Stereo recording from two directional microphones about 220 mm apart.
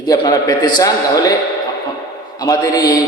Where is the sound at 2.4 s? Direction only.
15° left (ahead or behind).